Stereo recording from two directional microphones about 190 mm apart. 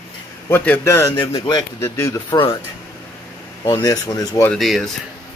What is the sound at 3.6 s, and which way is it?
Speech, 20° left (ahead or behind).